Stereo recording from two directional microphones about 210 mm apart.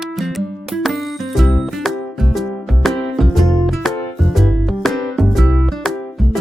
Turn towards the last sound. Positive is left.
turn(degrees=0)  # may be behind; listen again after turning